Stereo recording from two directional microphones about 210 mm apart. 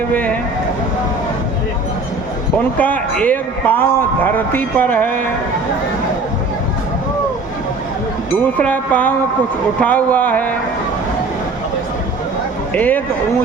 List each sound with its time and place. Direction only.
0.1 s a man's voice: 5° left (ahead or behind)
2.7 s a man's voice: 10° left (ahead or behind)
8.5 s a man's voice: 5° left (ahead or behind)
12.7 s a man's voice: 10° left (ahead or behind)